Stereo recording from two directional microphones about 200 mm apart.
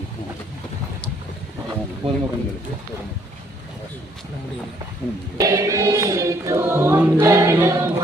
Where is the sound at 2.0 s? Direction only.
30° right (ahead or behind).